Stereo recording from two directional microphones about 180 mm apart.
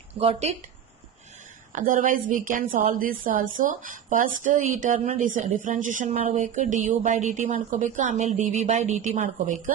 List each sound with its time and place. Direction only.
0.2 s speech: 35° right (ahead or behind)
1.7 s speech: 45° right (ahead or behind)